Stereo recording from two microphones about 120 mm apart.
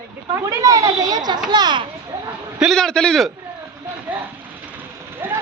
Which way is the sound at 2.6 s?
5° left (ahead or behind).